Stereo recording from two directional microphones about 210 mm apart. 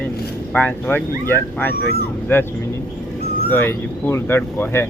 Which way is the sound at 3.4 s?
10° left (ahead or behind).